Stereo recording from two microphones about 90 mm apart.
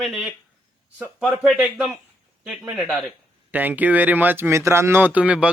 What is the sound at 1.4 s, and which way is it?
Speech, 5° right (ahead or behind).